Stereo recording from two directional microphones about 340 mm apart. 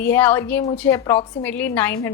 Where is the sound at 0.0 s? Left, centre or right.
Centre.